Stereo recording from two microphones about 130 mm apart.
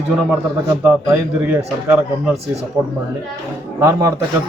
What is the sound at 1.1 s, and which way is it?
Speech, 25° right (ahead or behind).